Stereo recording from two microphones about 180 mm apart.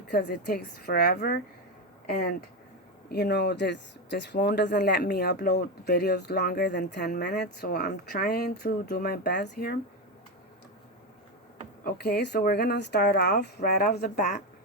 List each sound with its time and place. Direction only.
0.1 s speech: 65° left (ahead or behind)
11.9 s speech: 65° left (ahead or behind)
14.2 s speech: 40° left (ahead or behind)